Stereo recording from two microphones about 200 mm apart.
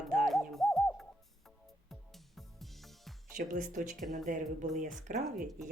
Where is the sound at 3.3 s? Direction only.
40° right (ahead or behind).